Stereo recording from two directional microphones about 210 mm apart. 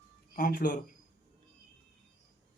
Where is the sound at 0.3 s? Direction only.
45° left (ahead or behind).